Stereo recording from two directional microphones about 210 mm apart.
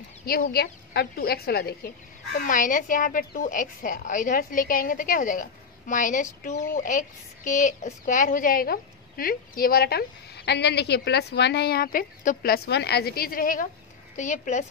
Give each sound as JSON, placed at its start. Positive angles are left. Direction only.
{"t": 0.3, "sound": "a woman's voice", "side_deg": 45}